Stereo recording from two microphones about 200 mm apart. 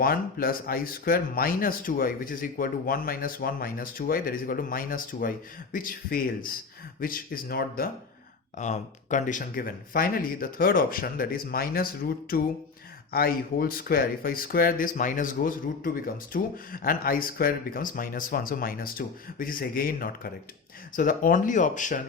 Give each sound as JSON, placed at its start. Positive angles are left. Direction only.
{"t": 0.0, "sound": "speech", "side_deg": 45}
{"t": 8.5, "sound": "speech", "side_deg": 35}